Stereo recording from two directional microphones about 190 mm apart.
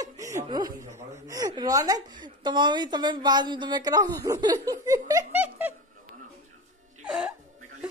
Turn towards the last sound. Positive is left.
turn(degrees=-5)  # may be behind; listen again after turning